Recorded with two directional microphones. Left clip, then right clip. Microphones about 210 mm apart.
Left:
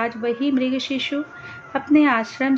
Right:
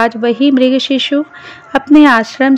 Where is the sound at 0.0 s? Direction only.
45° right (ahead or behind).